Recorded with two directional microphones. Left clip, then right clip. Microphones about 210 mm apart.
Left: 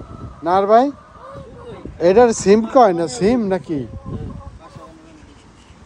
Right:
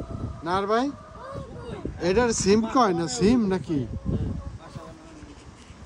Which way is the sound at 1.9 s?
5° right (ahead or behind).